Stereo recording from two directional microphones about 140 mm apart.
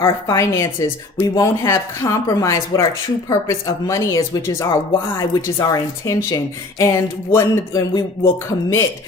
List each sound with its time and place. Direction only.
0.0 s a woman's voice: 20° left (ahead or behind)